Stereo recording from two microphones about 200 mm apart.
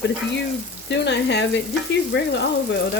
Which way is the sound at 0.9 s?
60° left (ahead or behind).